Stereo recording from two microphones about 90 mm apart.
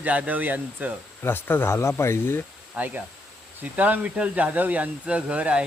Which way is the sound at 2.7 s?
20° right (ahead or behind).